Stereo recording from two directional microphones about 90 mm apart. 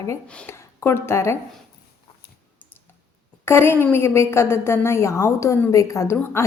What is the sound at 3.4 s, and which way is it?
A woman's voice, 25° left (ahead or behind).